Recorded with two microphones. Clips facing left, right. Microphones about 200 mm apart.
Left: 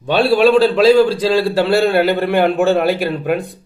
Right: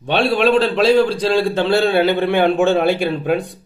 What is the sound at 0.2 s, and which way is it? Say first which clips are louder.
A man's voice: left 4 dB; 5° left (ahead or behind).